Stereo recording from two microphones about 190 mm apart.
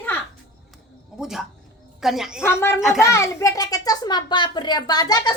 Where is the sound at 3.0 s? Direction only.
15° left (ahead or behind).